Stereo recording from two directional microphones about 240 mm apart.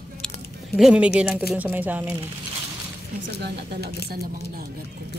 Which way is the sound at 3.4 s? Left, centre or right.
Right.